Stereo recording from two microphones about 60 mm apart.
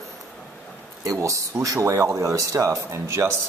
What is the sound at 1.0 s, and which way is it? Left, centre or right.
Speech, right.